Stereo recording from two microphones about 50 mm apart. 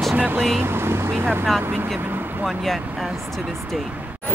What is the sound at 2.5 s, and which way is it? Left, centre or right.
Speech, centre.